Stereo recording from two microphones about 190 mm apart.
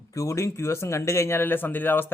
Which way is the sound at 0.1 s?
15° left (ahead or behind).